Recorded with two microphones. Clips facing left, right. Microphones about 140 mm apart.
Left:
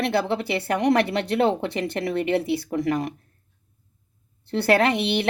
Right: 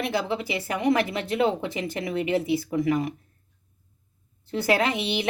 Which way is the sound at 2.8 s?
40° left (ahead or behind).